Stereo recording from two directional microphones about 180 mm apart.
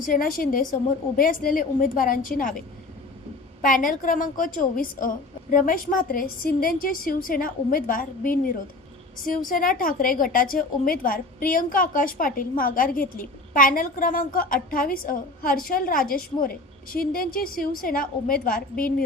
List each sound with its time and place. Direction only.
0.1 s a woman's voice: 50° left (ahead or behind)
3.6 s a woman's voice: 50° left (ahead or behind)